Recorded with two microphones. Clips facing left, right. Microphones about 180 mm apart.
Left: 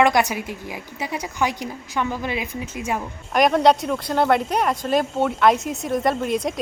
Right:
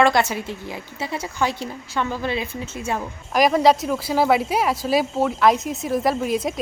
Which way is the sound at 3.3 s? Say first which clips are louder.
Even; centre (ahead or behind).